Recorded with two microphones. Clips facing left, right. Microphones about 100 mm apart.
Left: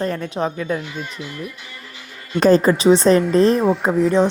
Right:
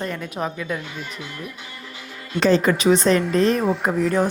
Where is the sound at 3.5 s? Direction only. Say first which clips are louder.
Left 4 dB; centre (ahead or behind).